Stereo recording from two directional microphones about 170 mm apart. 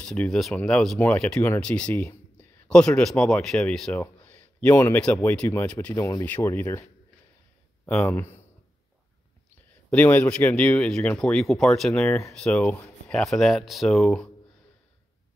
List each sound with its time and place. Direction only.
0.0 s speech: 5° left (ahead or behind)
9.8 s speech: 10° left (ahead or behind)
12.1 s speech: 15° left (ahead or behind)
12.4 s speech: 5° left (ahead or behind)